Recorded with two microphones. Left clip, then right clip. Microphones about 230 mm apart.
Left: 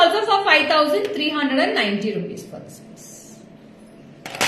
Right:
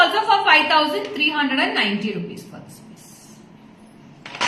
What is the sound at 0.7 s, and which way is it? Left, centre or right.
A woman's voice, centre.